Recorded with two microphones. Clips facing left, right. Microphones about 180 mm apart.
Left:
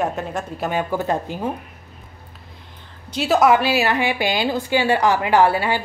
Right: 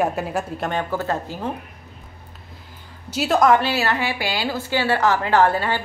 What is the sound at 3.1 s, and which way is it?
A woman's voice, centre (ahead or behind).